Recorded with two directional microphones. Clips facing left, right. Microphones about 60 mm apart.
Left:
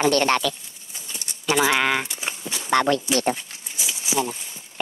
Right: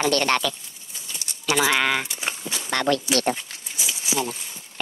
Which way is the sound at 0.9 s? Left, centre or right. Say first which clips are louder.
Even; left.